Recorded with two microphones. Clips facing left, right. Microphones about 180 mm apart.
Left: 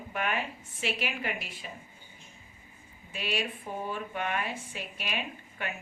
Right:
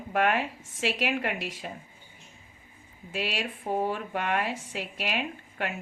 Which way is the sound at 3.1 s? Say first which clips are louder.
Right 2 dB; 75° right (ahead or behind).